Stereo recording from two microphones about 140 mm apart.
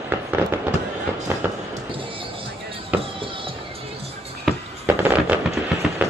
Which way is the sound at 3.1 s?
40° right (ahead or behind).